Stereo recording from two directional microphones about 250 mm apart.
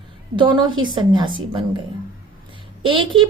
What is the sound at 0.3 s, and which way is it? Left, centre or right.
Speech, centre.